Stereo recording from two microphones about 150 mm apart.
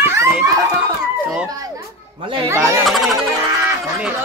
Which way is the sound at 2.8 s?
Centre (ahead or behind).